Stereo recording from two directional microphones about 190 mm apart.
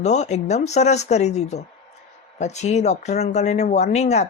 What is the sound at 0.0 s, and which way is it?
Speech, 35° left (ahead or behind).